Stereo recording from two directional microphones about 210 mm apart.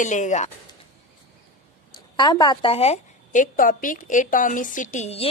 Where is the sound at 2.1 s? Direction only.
20° left (ahead or behind).